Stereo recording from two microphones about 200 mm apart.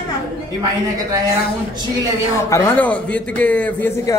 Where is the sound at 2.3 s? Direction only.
15° left (ahead or behind).